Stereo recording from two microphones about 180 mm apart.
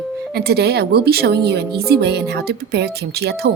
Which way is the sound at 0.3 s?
60° right (ahead or behind).